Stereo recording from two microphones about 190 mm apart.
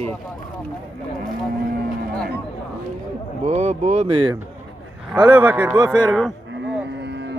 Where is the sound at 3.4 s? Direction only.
35° right (ahead or behind).